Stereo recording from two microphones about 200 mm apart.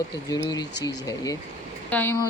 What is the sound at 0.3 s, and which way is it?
Female singing, 15° left (ahead or behind).